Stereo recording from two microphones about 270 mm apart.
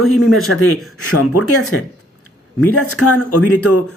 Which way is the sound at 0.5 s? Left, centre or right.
Left.